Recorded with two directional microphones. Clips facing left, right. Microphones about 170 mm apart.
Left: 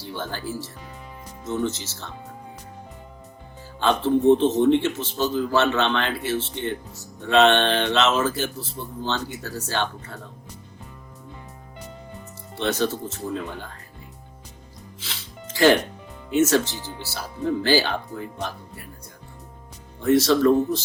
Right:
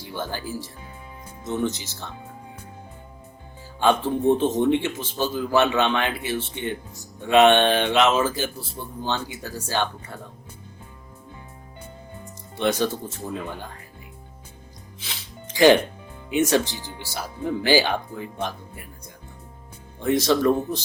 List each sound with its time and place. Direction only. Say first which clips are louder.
0.0 s speech: even; 10° right (ahead or behind)
3.8 s speech: left 1 dB; 15° right (ahead or behind)
12.5 s speech: right 1 dB; 15° right (ahead or behind)
15.0 s music: even; 15° right (ahead or behind)
16.3 s speech: left 1 dB; 15° right (ahead or behind)
20.0 s speech: left 2 dB; 15° right (ahead or behind)